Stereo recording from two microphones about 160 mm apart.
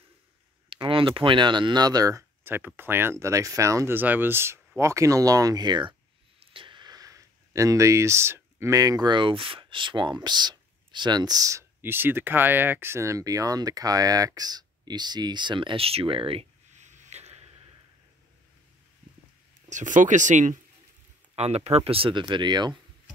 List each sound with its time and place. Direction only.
0.7 s speech: 35° right (ahead or behind)
16.7 s a sound: 50° right (ahead or behind)
19.7 s speech: 50° right (ahead or behind)
21.4 s speech: 40° right (ahead or behind)